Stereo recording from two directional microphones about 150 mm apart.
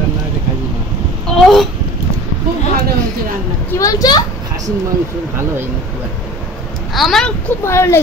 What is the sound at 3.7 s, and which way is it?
Speech, 20° left (ahead or behind).